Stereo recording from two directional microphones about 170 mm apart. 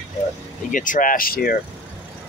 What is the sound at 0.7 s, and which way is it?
Speech, 50° left (ahead or behind).